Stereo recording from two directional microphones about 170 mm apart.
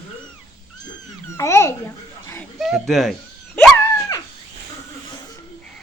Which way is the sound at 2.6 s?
Centre (ahead or behind).